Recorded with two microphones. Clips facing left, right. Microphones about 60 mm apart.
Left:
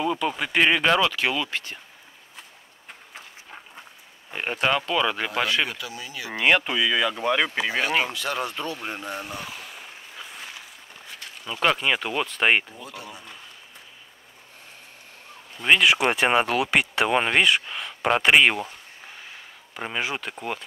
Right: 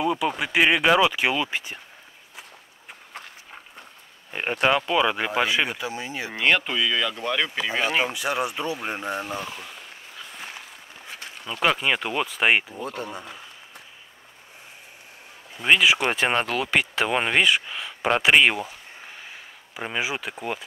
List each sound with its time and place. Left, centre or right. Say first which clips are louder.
0.0 s speech: right 1 dB; centre
4.3 s speech: right 2 dB; centre
5.8 s speech: right 5 dB; right
6.4 s speech: left 1 dB; centre
8.1 s speech: right 2 dB; centre
9.2 s speech: right 4 dB; centre
9.8 s a sound: left 1 dB; centre
11.4 s speech: even; centre
12.8 s speech: right 7 dB; right
15.5 s speech: even; centre